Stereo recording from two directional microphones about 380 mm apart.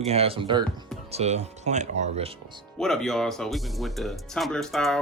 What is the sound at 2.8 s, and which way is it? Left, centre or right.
Speech, centre.